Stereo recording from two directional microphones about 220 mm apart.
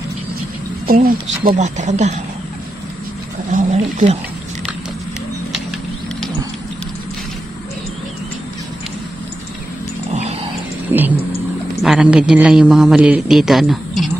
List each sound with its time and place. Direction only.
0.8 s speech: 40° right (ahead or behind)
3.5 s speech: 35° right (ahead or behind)
10.1 s a sound: 30° right (ahead or behind)
10.9 s vehicle: 10° right (ahead or behind)
11.8 s a man's voice: 5° right (ahead or behind)